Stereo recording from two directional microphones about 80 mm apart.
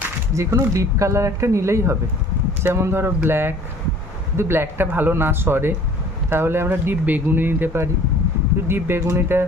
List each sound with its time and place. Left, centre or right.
0.3 s speech: right